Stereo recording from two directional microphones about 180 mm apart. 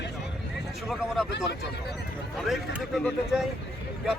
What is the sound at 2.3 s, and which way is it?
Speech, centre (ahead or behind).